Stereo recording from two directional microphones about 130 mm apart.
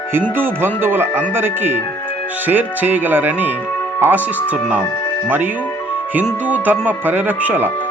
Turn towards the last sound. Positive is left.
turn(degrees=-15)  # may be behind; listen again after turning